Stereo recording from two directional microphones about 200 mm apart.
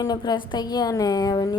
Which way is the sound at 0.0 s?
20° left (ahead or behind).